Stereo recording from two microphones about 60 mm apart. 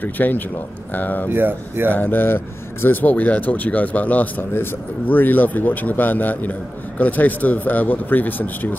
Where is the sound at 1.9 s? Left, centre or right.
Left.